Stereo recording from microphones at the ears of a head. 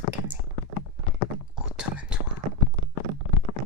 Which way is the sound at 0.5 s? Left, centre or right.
Left.